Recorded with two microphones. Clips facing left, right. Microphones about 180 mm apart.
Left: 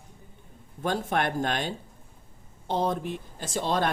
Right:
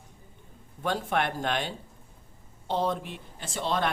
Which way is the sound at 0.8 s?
45° left (ahead or behind).